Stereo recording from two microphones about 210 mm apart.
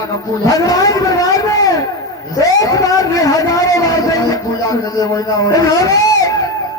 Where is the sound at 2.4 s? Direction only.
15° left (ahead or behind).